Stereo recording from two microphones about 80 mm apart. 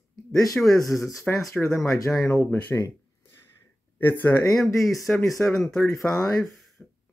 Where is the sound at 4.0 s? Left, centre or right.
Left.